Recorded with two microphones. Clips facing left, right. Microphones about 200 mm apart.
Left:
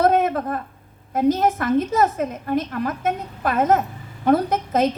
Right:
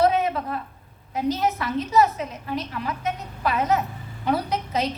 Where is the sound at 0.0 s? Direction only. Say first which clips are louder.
Left 3 dB; 50° left (ahead or behind).